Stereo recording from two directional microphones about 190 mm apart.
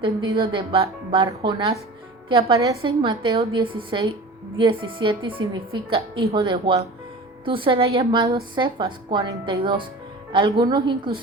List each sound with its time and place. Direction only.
0.0 s a woman's voice: 25° right (ahead or behind)